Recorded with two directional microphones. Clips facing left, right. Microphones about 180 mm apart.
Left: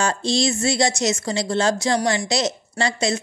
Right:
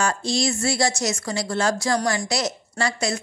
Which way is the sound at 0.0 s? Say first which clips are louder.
Left 2 dB; 25° left (ahead or behind).